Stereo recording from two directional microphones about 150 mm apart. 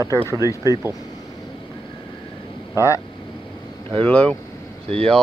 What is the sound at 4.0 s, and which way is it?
Speech, 10° left (ahead or behind).